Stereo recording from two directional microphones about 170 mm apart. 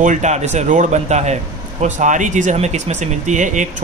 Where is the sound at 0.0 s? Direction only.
45° right (ahead or behind).